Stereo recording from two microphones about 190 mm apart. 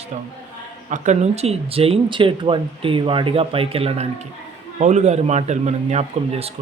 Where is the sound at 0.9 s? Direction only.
40° right (ahead or behind).